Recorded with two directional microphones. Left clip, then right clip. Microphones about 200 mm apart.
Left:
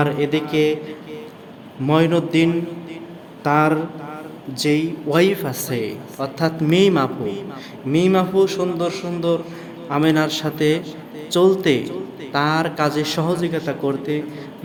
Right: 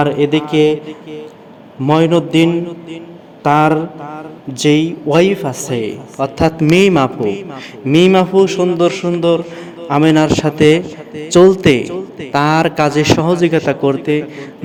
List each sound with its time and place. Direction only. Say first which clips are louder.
0.0 s a man's voice: right 6 dB; 30° right (ahead or behind)
1.8 s a man's voice: right 5 dB; 30° right (ahead or behind)
5.0 s a man's voice: right 5 dB; 25° right (ahead or behind); by 14.3 s 40° right (ahead or behind)